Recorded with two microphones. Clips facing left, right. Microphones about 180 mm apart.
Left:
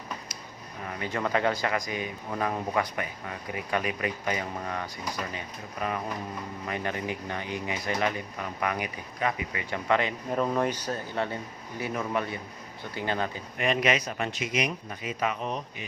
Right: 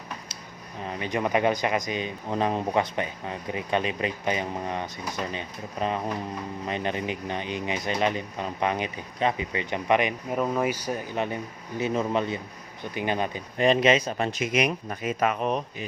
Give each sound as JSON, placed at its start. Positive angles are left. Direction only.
{"t": 0.9, "sound": "speech", "side_deg": -20}
{"t": 10.4, "sound": "speech", "side_deg": -5}
{"t": 13.6, "sound": "speech", "side_deg": -30}
{"t": 14.3, "sound": "speech", "side_deg": -55}